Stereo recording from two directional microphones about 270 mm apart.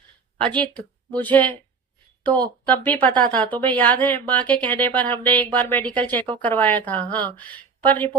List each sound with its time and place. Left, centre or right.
0.3 s a woman's voice: centre